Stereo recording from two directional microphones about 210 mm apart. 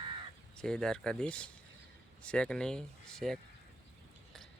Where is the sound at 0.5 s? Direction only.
5° left (ahead or behind).